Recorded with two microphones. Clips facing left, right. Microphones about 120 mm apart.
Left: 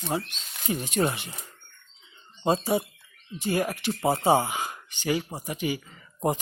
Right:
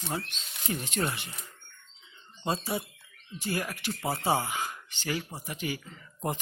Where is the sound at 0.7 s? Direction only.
15° left (ahead or behind).